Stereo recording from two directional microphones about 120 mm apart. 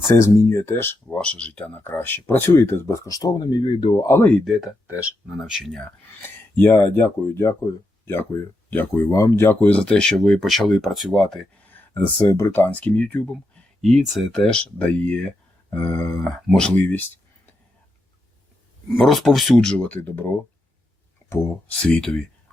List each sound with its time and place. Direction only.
0.2 s speech: 25° left (ahead or behind)
4.2 s speech: 10° left (ahead or behind)
4.9 s speech: 10° right (ahead or behind)
5.4 s speech: centre (ahead or behind)
5.8 s speech: 15° left (ahead or behind); by 11.4 s centre (ahead or behind)
11.7 s speech: 15° left (ahead or behind)
18.9 s speech: centre (ahead or behind)
21.7 s speech: 10° left (ahead or behind)